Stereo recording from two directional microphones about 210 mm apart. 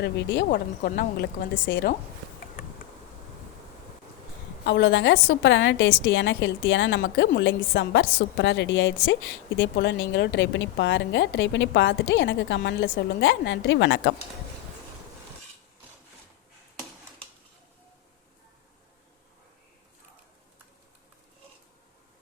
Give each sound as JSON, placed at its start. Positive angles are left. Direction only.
{"t": 0.0, "sound": "speech", "side_deg": 55}
{"t": 4.6, "sound": "a woman's voice", "side_deg": 55}